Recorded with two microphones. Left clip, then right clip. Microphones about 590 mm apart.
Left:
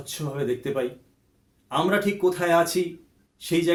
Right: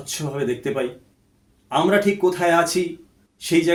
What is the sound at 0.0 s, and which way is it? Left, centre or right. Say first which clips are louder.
Speech: right 4 dB; left.